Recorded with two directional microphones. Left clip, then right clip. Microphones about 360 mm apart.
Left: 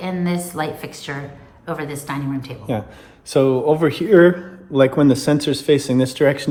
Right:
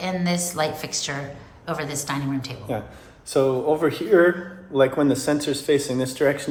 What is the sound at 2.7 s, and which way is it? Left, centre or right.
Speech, left.